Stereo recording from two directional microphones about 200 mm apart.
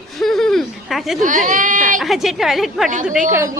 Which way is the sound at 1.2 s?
40° right (ahead or behind).